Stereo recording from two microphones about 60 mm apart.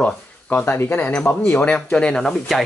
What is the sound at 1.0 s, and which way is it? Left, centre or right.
Speech, left.